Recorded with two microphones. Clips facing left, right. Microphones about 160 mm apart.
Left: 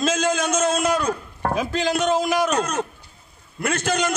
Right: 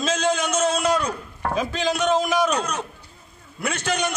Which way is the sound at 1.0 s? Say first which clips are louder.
Left 3 dB; 40° left (ahead or behind).